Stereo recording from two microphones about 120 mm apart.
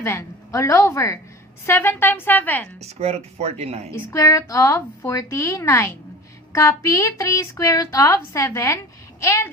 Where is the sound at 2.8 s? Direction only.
65° right (ahead or behind).